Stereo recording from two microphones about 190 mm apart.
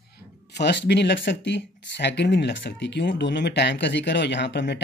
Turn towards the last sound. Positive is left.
turn(degrees=65)  # may be behind; listen again after turning